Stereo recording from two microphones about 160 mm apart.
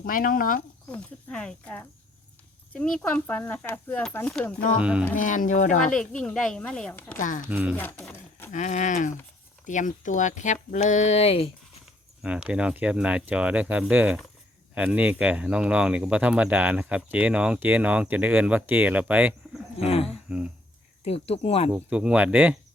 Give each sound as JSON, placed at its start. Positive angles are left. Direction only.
{"t": 0.0, "sound": "speech", "side_deg": 60}
{"t": 0.9, "sound": "speech", "side_deg": 5}
{"t": 4.8, "sound": "speech", "side_deg": -5}
{"t": 5.1, "sound": "speech", "side_deg": 55}
{"t": 5.9, "sound": "speech", "side_deg": 5}
{"t": 7.2, "sound": "speech", "side_deg": 55}
{"t": 7.5, "sound": "speech", "side_deg": -10}
{"t": 7.8, "sound": "a sound", "side_deg": 10}
{"t": 8.5, "sound": "speech", "side_deg": 50}
{"t": 12.2, "sound": "speech", "side_deg": -5}
{"t": 19.8, "sound": "speech", "side_deg": 40}
{"t": 21.7, "sound": "speech", "side_deg": -5}